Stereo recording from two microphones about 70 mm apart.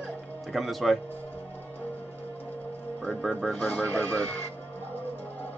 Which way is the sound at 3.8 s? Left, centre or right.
Right.